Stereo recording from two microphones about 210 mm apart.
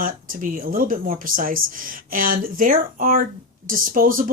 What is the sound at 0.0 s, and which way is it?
Speech, 40° right (ahead or behind).